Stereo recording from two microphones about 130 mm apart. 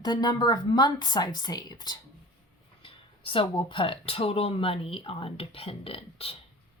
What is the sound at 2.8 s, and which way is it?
Speech, 40° left (ahead or behind).